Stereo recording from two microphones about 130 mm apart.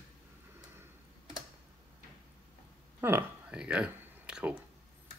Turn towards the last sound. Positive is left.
turn(degrees=-10)  # may be behind; listen again after turning